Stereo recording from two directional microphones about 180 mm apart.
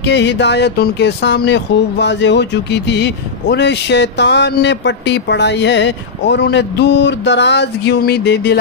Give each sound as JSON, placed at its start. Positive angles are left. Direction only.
{"t": 0.0, "sound": "speech", "side_deg": 75}